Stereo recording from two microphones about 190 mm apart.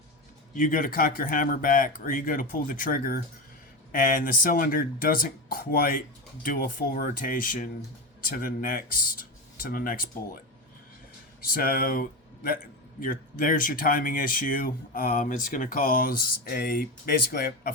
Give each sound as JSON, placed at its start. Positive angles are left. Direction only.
{"t": 0.5, "sound": "speech", "side_deg": 45}